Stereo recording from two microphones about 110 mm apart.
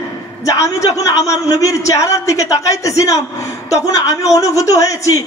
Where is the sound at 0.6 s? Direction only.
30° left (ahead or behind).